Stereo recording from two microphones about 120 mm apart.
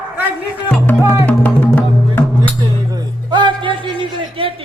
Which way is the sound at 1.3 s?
15° left (ahead or behind).